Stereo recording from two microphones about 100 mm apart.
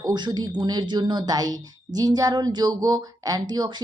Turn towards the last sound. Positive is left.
turn(degrees=-45)  # may be behind; listen again after turning